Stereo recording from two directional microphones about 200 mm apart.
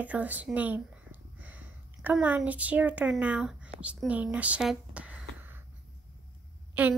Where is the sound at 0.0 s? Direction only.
5° right (ahead or behind).